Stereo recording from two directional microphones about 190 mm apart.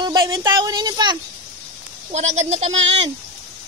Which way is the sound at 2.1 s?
35° right (ahead or behind).